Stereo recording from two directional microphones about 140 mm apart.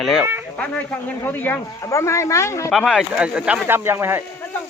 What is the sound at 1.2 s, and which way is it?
A man's voice, 15° left (ahead or behind).